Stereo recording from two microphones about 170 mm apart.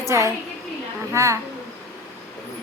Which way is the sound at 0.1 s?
15° right (ahead or behind).